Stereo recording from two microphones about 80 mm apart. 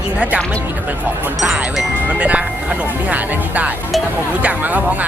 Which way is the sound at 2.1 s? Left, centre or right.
Centre.